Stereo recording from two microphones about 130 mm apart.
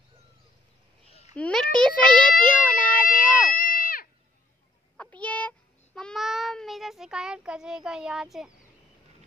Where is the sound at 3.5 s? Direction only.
90° left.